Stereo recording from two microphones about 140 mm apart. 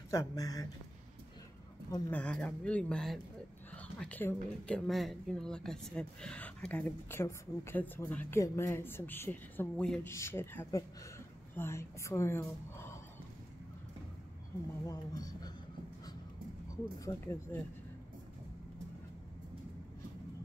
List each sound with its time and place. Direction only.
0.1 s a woman's voice: 25° left (ahead or behind)
2.0 s a woman's voice: 10° left (ahead or behind)
14.9 s speech: 25° left (ahead or behind)
17.0 s a woman's voice: 20° left (ahead or behind)